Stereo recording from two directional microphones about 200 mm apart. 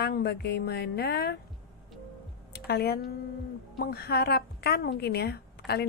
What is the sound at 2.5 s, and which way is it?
A woman's voice, 50° left (ahead or behind).